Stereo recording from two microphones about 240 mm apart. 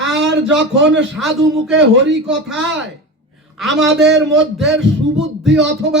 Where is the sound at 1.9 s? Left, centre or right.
Right.